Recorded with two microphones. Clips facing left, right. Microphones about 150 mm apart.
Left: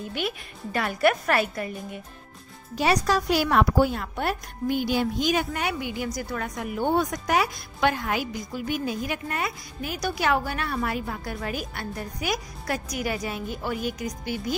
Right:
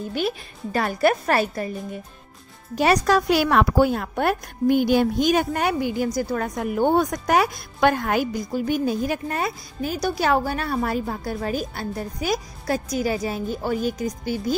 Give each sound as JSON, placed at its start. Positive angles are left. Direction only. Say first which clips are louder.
{"t": 0.7, "sound": "a woman's voice", "louder": "right 3 dB", "side_deg": -35}
{"t": 2.8, "sound": "a woman's voice", "louder": "right 4 dB", "side_deg": -55}
{"t": 3.9, "sound": "a woman's voice", "louder": "right 6 dB", "side_deg": -50}